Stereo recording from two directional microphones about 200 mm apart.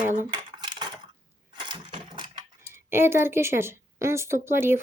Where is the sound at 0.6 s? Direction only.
20° right (ahead or behind).